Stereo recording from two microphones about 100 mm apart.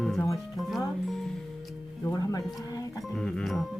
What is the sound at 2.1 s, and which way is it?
Speech, 40° left (ahead or behind).